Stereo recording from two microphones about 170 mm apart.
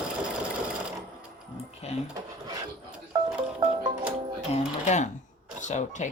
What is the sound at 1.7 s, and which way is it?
Speech, 35° left (ahead or behind).